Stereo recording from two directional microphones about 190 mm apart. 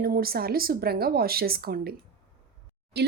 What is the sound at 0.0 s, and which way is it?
Speech, 50° right (ahead or behind).